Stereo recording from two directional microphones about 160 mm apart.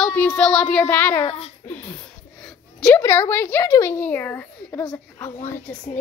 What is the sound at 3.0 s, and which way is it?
A woman's voice, 15° left (ahead or behind).